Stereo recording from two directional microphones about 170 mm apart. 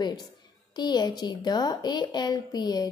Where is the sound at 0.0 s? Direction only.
25° left (ahead or behind).